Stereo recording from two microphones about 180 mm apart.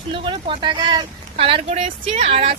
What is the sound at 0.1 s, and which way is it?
Speech, 30° right (ahead or behind).